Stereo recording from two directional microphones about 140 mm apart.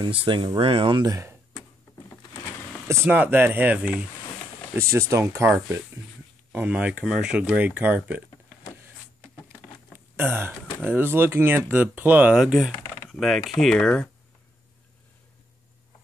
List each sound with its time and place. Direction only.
0.0 s speech: 40° right (ahead or behind); by 1.4 s 20° right (ahead or behind)
2.9 s speech: 15° right (ahead or behind)
4.7 s speech: 20° right (ahead or behind)
6.5 s speech: 10° right (ahead or behind)
9.9 s speech: 15° right (ahead or behind); by 14.0 s 5° left (ahead or behind)